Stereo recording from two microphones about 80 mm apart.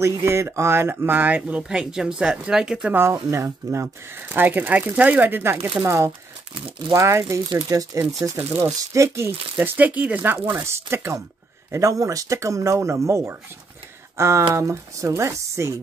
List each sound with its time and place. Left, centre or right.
0.0 s speech: right
1.6 s speech: centre
2.9 s speech: right
9.6 s speech: right
10.6 s speech: right